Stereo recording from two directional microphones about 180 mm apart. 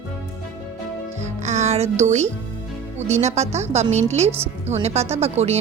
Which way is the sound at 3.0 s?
40° right (ahead or behind).